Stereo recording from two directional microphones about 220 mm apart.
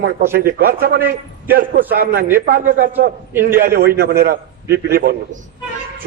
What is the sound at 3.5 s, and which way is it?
A man's voice, 40° right (ahead or behind).